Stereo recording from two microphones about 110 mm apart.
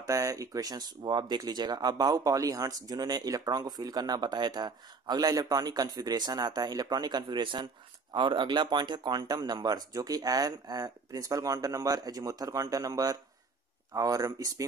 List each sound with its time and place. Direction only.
0.0 s speech: 30° right (ahead or behind)